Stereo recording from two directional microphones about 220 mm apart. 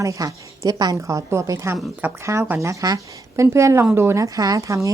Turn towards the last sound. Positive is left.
turn(degrees=-15)  # may be behind; listen again after turning